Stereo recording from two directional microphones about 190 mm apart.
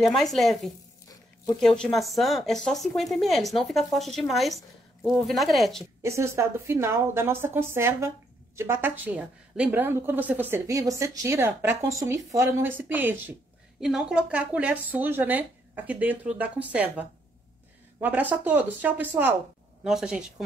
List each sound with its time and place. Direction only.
0.0 s a woman's voice: centre (ahead or behind)
1.0 s zipper: 20° left (ahead or behind)
1.6 s a woman's voice: centre (ahead or behind)
6.0 s a woman's voice: 15° right (ahead or behind)
18.0 s a woman's voice: 10° right (ahead or behind)